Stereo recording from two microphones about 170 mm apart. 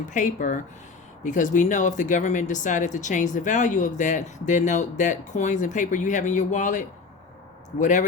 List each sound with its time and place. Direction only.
0.1 s speech: 50° left (ahead or behind)